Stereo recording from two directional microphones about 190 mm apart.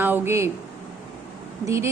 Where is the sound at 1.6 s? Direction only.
15° right (ahead or behind).